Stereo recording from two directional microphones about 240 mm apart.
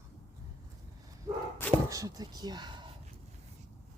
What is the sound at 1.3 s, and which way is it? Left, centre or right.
Speech, centre.